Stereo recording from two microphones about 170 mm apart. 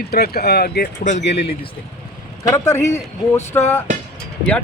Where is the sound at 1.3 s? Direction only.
35° left (ahead or behind).